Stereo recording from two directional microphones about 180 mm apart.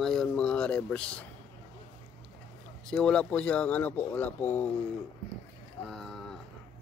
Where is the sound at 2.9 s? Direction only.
5° left (ahead or behind).